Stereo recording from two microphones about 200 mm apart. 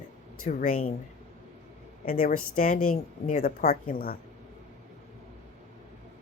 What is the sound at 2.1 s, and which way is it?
A woman's voice, 45° left (ahead or behind).